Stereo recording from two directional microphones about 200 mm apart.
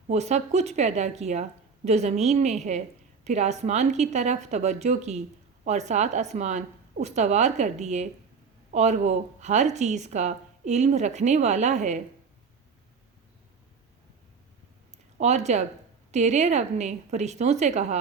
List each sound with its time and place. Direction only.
0.1 s speech: 35° right (ahead or behind)
15.2 s speech: 35° right (ahead or behind)